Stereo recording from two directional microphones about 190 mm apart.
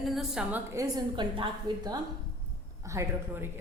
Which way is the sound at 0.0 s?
Centre (ahead or behind).